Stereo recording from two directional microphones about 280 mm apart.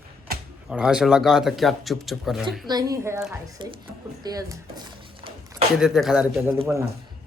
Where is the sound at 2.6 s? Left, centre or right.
Centre.